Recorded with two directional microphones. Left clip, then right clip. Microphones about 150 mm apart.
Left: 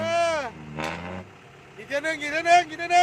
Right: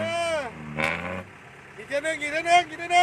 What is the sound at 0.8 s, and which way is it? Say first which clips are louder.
Vehicle: right 5 dB; 5° right (ahead or behind).